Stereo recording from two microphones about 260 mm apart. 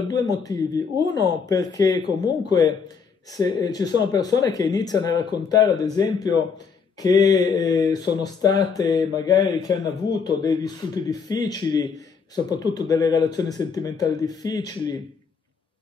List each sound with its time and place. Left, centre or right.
0.1 s speech: centre